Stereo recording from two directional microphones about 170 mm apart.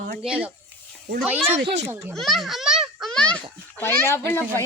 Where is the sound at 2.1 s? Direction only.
Centre (ahead or behind).